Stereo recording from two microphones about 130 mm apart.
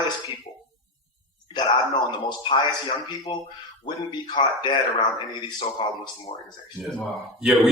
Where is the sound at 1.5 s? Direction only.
35° left (ahead or behind).